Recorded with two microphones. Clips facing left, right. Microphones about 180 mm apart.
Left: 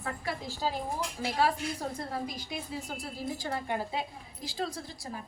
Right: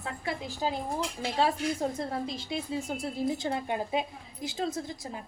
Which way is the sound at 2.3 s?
25° right (ahead or behind).